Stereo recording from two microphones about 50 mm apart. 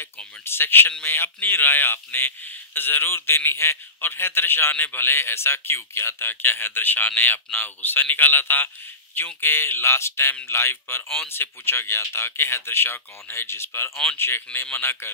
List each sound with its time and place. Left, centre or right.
0.0 s a man's voice: left
14.5 s speech: left